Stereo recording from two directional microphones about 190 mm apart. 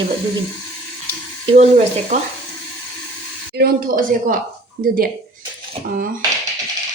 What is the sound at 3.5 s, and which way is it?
Speech, 50° right (ahead or behind).